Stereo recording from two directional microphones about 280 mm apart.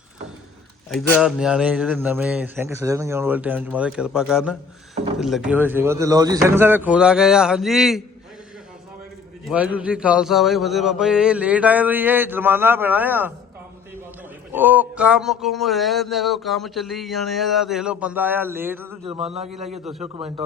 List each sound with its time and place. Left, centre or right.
0.9 s speech: centre
9.4 s speech: centre
14.5 s speech: centre
19.5 s a man's voice: right